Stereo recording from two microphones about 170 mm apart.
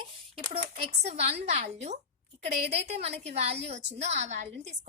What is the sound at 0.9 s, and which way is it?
A woman's voice, 40° right (ahead or behind).